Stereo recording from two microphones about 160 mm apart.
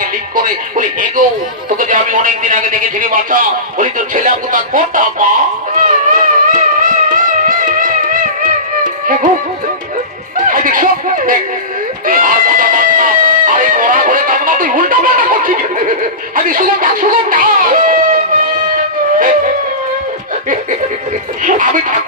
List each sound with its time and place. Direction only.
0.4 s a man's voice: 60° right (ahead or behind)
5.8 s music: 55° right (ahead or behind)
10.3 s music: 60° right (ahead or behind)
12.1 s chicken: 60° right (ahead or behind)
19.1 s a sound: 60° right (ahead or behind)
21.5 s a man's voice: 55° right (ahead or behind)